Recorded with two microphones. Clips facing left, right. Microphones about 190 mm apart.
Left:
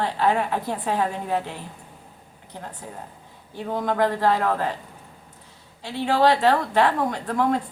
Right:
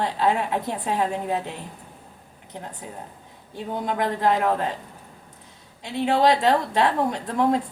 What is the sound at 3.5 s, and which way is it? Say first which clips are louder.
Speech: left 3 dB; 20° right (ahead or behind).